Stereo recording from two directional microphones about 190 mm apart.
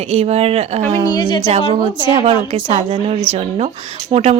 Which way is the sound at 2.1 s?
35° right (ahead or behind).